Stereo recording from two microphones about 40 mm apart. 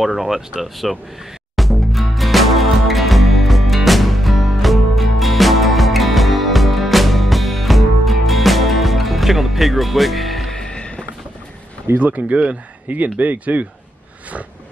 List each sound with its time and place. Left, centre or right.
0.0 s speech: centre
1.6 s music: centre
10.5 s music: left
12.0 s speech: right